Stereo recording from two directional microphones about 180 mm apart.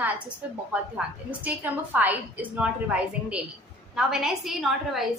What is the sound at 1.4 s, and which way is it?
A woman's voice, 10° right (ahead or behind).